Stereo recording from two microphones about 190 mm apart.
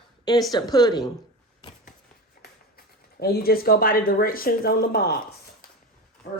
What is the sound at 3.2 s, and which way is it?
Speech, 55° left (ahead or behind).